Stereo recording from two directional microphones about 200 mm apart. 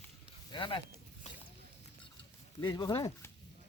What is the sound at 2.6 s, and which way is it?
Speech, 20° left (ahead or behind).